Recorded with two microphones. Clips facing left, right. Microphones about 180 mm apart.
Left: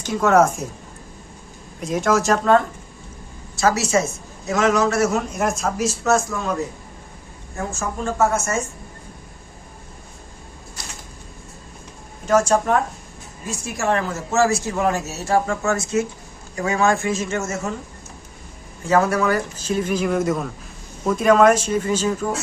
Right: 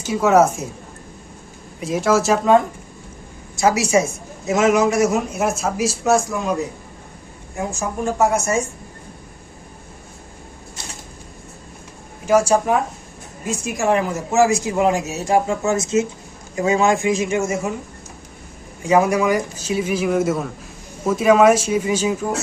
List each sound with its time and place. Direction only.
0.0 s a man's voice: 10° right (ahead or behind)
1.8 s a man's voice: centre (ahead or behind)
12.2 s a man's voice: 10° right (ahead or behind)
18.8 s a man's voice: 15° right (ahead or behind)